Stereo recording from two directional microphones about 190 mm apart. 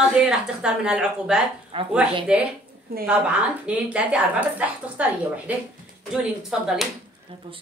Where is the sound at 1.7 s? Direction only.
25° right (ahead or behind).